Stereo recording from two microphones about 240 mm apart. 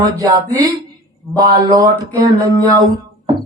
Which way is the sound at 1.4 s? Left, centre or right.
Right.